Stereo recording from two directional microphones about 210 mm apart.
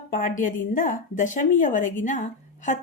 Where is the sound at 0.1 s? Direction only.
40° left (ahead or behind).